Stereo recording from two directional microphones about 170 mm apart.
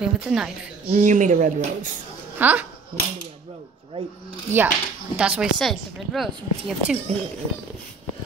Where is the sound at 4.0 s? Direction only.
35° right (ahead or behind).